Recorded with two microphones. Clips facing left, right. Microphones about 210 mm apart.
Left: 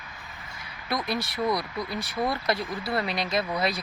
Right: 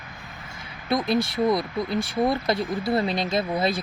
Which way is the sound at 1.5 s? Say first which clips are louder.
Right 5 dB; 25° right (ahead or behind).